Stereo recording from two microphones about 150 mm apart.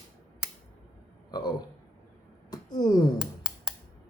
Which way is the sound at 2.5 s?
25° left (ahead or behind).